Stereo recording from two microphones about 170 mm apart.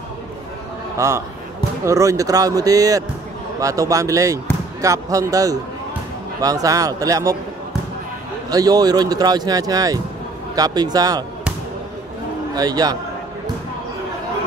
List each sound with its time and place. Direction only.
0.9 s a man's voice: 15° right (ahead or behind)
8.5 s speech: 20° right (ahead or behind)
12.5 s speech: 25° right (ahead or behind)